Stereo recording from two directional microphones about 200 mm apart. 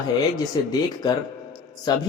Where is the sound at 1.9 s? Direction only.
20° left (ahead or behind).